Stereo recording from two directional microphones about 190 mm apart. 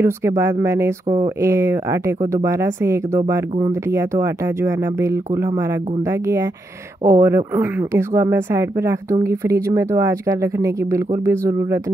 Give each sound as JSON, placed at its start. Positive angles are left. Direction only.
{"t": 0.0, "sound": "speech", "side_deg": -15}
{"t": 1.0, "sound": "speech", "side_deg": -35}
{"t": 1.4, "sound": "speech", "side_deg": -15}